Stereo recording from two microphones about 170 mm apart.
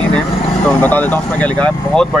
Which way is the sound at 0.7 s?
10° left (ahead or behind).